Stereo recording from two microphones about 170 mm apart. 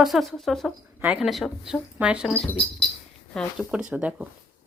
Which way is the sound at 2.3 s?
10° left (ahead or behind).